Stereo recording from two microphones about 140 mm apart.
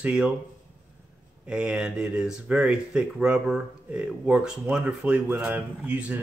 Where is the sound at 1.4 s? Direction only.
5° right (ahead or behind).